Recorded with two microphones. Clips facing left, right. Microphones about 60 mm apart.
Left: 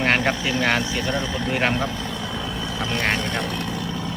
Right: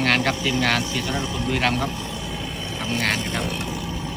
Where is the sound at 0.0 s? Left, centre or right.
Left.